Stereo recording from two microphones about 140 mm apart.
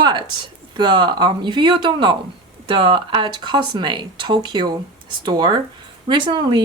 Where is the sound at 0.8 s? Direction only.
35° right (ahead or behind).